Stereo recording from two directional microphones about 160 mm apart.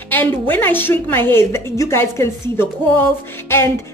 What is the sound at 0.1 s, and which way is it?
A woman's voice, 10° left (ahead or behind).